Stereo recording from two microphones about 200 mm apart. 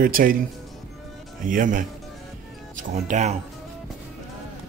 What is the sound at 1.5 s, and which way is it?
Speech, 40° right (ahead or behind).